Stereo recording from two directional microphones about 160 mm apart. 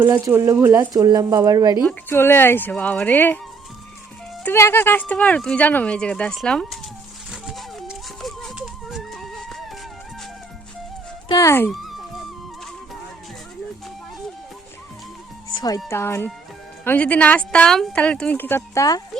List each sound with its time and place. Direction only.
0.0 s speech: 15° right (ahead or behind)
1.8 s speech: 10° left (ahead or behind)
4.4 s speech: 15° left (ahead or behind)
7.3 s a sound: centre (ahead or behind)
11.3 s speech: 20° left (ahead or behind)
11.7 s dog: centre (ahead or behind)
15.9 s speech: 15° left (ahead or behind)